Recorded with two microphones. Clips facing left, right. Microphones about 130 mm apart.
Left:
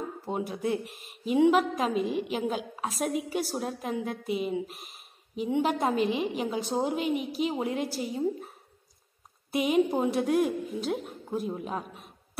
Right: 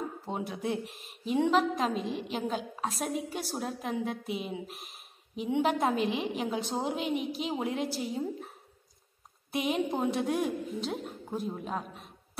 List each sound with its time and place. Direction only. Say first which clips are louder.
0.2 s a woman's voice: left 4 dB; centre (ahead or behind)
9.5 s a woman's voice: left 5 dB; centre (ahead or behind)